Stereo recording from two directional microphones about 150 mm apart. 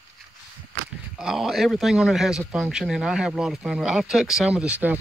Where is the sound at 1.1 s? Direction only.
5° right (ahead or behind).